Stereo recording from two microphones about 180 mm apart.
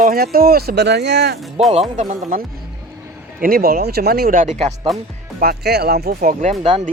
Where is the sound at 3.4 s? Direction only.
55° right (ahead or behind); by 4.8 s 40° right (ahead or behind).